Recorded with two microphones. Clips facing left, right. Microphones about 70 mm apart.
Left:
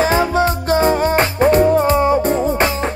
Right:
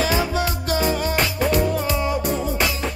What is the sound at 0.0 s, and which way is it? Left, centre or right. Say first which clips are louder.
Music: left 7 dB; left.